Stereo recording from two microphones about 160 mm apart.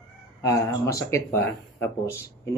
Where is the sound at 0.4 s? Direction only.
20° left (ahead or behind).